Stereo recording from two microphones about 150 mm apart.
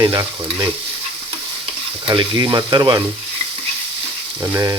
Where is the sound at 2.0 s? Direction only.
30° right (ahead or behind).